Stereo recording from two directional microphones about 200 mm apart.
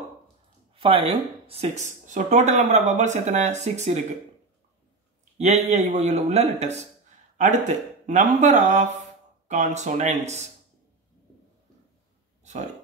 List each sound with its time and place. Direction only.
0.7 s speech: 25° right (ahead or behind)
5.4 s speech: 35° right (ahead or behind)